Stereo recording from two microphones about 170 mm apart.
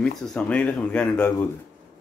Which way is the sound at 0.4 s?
5° left (ahead or behind).